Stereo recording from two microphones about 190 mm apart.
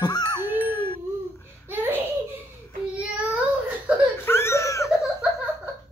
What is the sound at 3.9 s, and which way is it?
Laughter, 5° right (ahead or behind).